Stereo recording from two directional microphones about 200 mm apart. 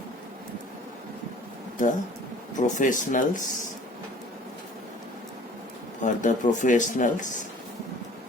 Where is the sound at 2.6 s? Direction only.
40° left (ahead or behind).